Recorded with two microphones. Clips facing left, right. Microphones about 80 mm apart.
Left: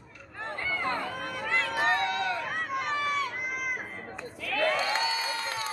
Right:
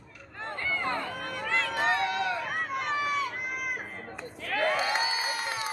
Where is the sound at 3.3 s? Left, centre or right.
Centre.